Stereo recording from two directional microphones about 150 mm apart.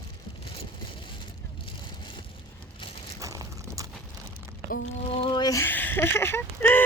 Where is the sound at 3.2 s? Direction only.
20° right (ahead or behind).